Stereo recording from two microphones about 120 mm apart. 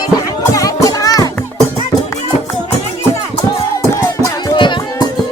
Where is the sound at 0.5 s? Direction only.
30° left (ahead or behind).